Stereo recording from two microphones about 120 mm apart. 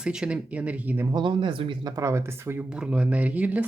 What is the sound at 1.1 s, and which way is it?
Speech, 40° right (ahead or behind).